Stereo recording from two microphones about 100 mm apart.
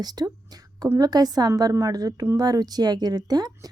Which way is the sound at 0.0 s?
40° right (ahead or behind).